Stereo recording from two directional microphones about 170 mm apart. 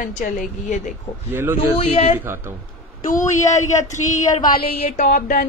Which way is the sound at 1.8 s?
35° left (ahead or behind).